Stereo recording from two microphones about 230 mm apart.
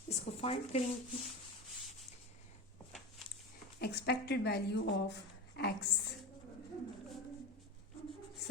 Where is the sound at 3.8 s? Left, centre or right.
Left.